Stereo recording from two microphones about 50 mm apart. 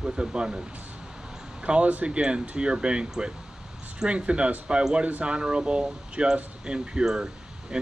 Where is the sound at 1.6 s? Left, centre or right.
Right.